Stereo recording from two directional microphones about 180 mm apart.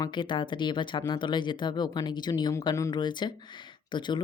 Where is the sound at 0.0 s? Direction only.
25° left (ahead or behind).